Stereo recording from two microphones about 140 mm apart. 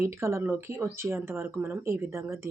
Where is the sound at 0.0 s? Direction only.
20° right (ahead or behind).